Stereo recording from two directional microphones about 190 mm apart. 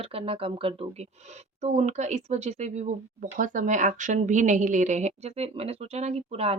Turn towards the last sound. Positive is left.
turn(degrees=-30)  # may be behind; listen again after turning